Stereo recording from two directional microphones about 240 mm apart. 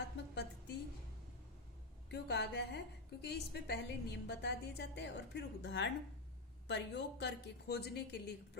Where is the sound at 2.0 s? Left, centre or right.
Left.